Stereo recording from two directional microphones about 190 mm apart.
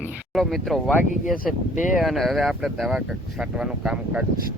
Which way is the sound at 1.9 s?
Centre (ahead or behind).